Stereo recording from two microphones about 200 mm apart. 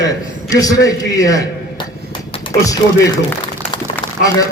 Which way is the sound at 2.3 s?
20° left (ahead or behind).